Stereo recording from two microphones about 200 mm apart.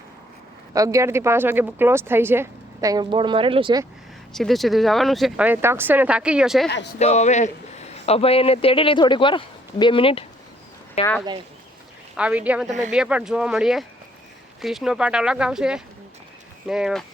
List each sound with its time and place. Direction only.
0.7 s speech: 15° right (ahead or behind)
4.4 s speech: centre (ahead or behind)
7.0 s a man's voice: 35° left (ahead or behind)
12.1 s speech: 5° right (ahead or behind)